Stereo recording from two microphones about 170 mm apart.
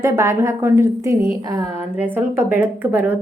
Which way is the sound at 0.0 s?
15° right (ahead or behind).